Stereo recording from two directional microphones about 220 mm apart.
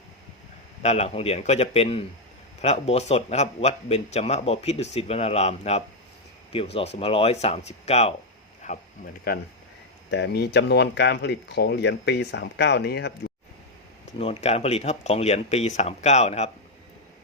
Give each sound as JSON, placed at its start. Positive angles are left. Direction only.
{"t": 0.8, "sound": "speech", "side_deg": 30}
{"t": 9.3, "sound": "speech", "side_deg": 40}
{"t": 14.2, "sound": "speech", "side_deg": 25}